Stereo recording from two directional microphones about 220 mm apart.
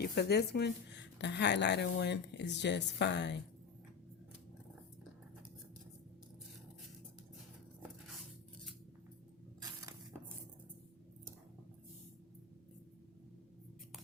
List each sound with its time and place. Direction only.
0.0 s a woman's voice: 45° left (ahead or behind)
9.6 s coin: 15° right (ahead or behind)